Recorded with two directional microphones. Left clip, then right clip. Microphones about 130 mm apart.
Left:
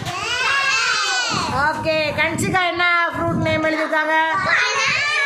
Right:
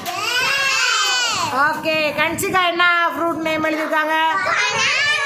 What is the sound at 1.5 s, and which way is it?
A woman's voice, 25° right (ahead or behind).